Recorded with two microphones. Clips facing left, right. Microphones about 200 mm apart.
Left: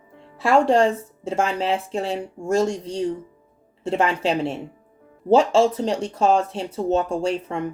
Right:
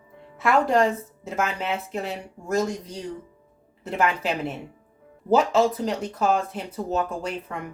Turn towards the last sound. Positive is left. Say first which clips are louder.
# left 7 dB
turn(degrees=30)  # may be behind; listen again after turning